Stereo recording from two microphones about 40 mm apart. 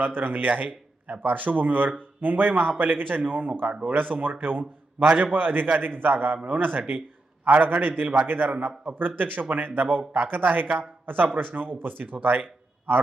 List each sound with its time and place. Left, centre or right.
0.0 s speech: right
8.4 s speech: right
9.0 s speech: right